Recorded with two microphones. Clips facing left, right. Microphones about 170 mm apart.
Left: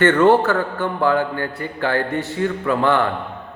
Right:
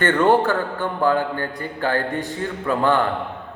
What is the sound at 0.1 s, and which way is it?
A man's voice, 15° right (ahead or behind).